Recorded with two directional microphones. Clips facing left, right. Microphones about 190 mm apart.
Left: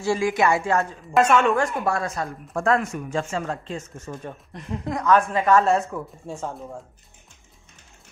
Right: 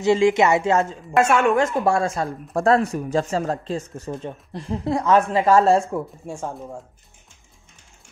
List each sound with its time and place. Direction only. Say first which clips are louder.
0.0 s a woman's voice: right 5 dB; 20° right (ahead or behind)
1.1 s a woman's voice: right 1 dB; 10° right (ahead or behind)
1.6 s a woman's voice: right 4 dB; 25° right (ahead or behind)
6.2 s a woman's voice: right 1 dB; 15° right (ahead or behind)